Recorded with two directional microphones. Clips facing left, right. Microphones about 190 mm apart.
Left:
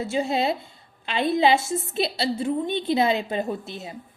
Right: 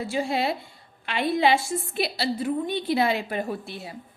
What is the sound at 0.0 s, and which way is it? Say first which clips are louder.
A woman's voice: left 2 dB; 25° left (ahead or behind).